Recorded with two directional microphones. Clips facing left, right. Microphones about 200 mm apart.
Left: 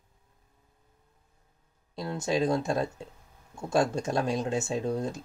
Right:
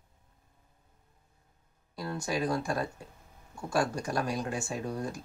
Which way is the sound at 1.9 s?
25° left (ahead or behind).